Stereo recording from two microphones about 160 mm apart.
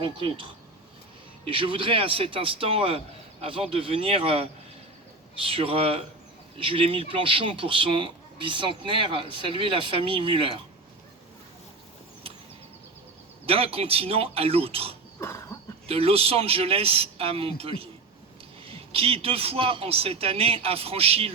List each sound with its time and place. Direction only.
0.0 s speech: 30° right (ahead or behind)
13.4 s speech: 35° right (ahead or behind)
15.2 s a sound: 20° left (ahead or behind)
15.9 s speech: 40° right (ahead or behind)